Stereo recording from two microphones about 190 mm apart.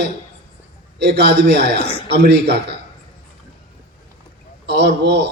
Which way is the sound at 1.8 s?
30° left (ahead or behind).